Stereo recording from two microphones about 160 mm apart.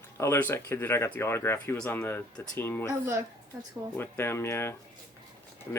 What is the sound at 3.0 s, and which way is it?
Speech, 15° right (ahead or behind).